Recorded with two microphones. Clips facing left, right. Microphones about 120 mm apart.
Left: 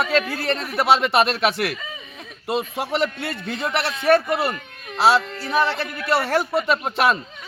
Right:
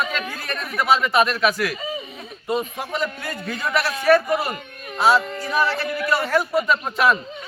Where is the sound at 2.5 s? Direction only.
75° left (ahead or behind).